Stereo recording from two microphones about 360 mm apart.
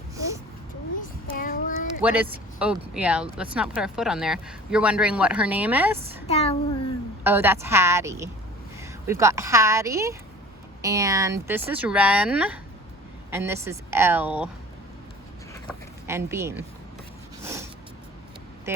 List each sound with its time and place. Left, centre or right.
1.3 s child singing: left
2.0 s speech: centre
6.2 s child singing: centre
7.3 s a woman's voice: centre
16.0 s a woman's voice: centre
17.4 s a sound: centre